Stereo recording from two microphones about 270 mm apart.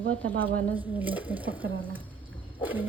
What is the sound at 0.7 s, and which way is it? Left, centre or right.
Speech, centre.